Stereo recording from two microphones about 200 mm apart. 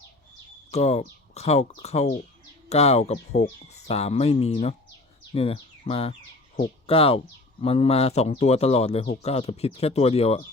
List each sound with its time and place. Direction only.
0.7 s speech: 35° left (ahead or behind)